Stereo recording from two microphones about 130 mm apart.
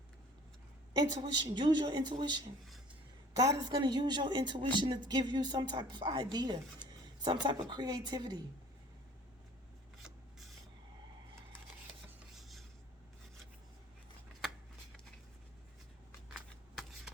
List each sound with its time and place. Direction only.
0.9 s a woman's voice: 30° right (ahead or behind)
3.5 s a woman's voice: 30° right (ahead or behind)
12.4 s filing: centre (ahead or behind)